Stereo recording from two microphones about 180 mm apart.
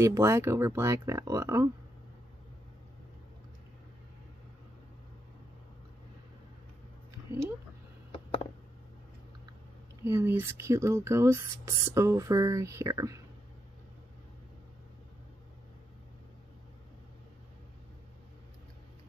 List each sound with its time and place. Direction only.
0.0 s speech: 15° right (ahead or behind)
8.1 s a sound: 30° left (ahead or behind)
10.0 s speech: 15° right (ahead or behind)